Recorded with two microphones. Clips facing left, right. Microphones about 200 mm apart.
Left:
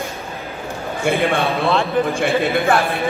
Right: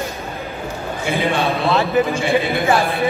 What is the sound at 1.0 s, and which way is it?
Speech, 50° left (ahead or behind).